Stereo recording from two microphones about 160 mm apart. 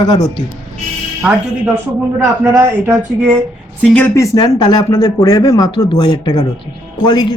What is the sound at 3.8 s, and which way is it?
Speech, 5° left (ahead or behind).